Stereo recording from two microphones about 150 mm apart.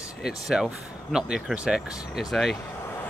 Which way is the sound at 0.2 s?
Centre (ahead or behind).